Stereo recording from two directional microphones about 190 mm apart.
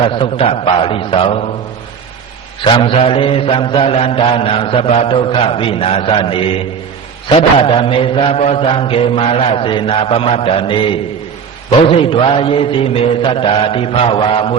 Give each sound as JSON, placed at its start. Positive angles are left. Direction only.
{"t": 0.0, "sound": "mantra", "side_deg": 25}
{"t": 2.6, "sound": "mantra", "side_deg": 30}